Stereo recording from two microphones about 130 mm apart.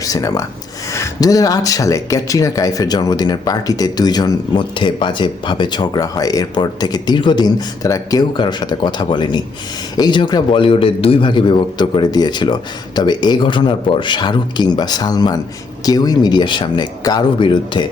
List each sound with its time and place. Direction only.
0.0 s speech: 25° left (ahead or behind)